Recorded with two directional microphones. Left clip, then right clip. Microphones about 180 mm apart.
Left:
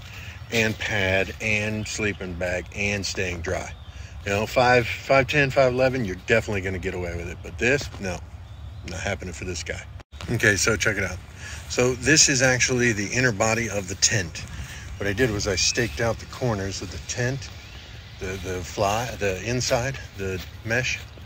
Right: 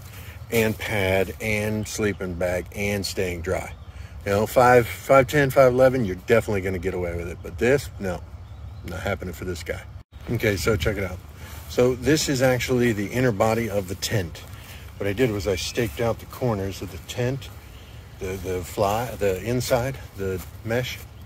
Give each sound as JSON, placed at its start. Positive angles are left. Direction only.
{"t": 0.5, "sound": "speech", "side_deg": -25}
{"t": 10.3, "sound": "speech", "side_deg": -10}
{"t": 15.0, "sound": "speech", "side_deg": -10}